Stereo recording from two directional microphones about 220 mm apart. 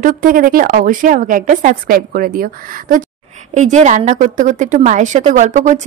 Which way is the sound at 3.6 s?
35° right (ahead or behind).